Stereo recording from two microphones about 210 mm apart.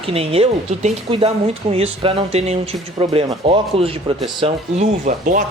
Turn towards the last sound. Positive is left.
turn(degrees=-40)  # may be behind; listen again after turning